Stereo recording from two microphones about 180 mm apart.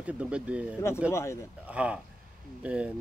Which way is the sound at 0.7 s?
15° left (ahead or behind).